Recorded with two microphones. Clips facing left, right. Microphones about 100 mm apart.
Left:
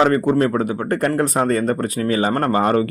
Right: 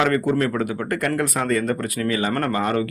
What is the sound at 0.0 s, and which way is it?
Speech, 30° left (ahead or behind).